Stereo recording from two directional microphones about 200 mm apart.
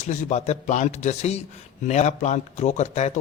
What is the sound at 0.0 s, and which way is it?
A man's voice, 35° left (ahead or behind).